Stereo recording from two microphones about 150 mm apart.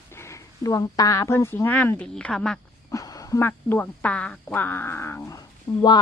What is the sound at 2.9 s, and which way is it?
Speech, 25° left (ahead or behind).